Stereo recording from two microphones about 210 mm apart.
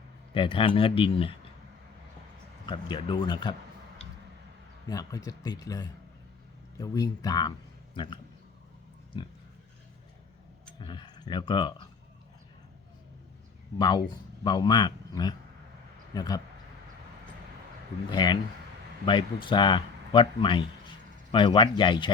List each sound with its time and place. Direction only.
0.3 s a man's voice: 25° left (ahead or behind)
2.6 s a man's voice: 20° left (ahead or behind)
4.9 s a man's voice: 15° left (ahead or behind)
10.8 s speech: 20° left (ahead or behind)
13.7 s a man's voice: 20° left (ahead or behind)
18.1 s a man's voice: 20° left (ahead or behind)